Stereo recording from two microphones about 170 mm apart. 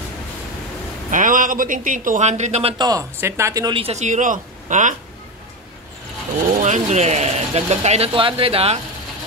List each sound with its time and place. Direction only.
1.1 s speech: 50° right (ahead or behind)
2.8 s speech: 20° right (ahead or behind)
3.8 s speech: 40° right (ahead or behind)
6.6 s speech: 45° right (ahead or behind)